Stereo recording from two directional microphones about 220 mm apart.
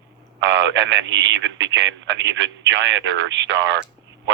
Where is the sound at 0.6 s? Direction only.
55° right (ahead or behind).